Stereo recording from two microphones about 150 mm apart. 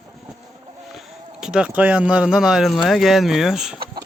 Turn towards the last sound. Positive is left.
turn(degrees=-5)  # may be behind; listen again after turning